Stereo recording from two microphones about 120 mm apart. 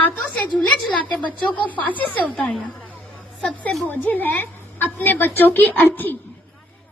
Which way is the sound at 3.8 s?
15° left (ahead or behind).